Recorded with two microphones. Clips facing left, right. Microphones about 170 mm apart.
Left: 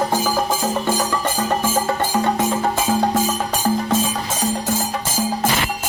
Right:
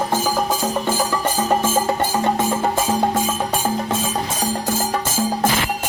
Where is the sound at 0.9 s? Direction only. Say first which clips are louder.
Right 1 dB; 10° right (ahead or behind).